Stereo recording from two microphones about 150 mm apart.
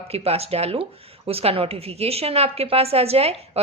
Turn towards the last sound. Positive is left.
turn(degrees=-40)  # may be behind; listen again after turning